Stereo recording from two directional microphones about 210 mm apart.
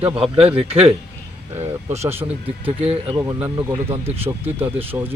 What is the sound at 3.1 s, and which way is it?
Speech, 15° right (ahead or behind).